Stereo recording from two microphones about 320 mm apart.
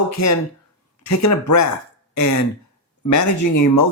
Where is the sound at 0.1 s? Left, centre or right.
Left.